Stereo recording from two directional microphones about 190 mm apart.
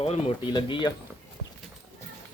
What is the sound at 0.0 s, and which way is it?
Speech, 35° left (ahead or behind).